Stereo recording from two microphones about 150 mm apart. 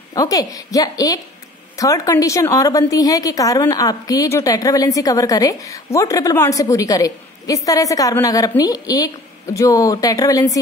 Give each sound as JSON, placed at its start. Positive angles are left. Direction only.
{"t": 0.1, "sound": "a woman's voice", "side_deg": 20}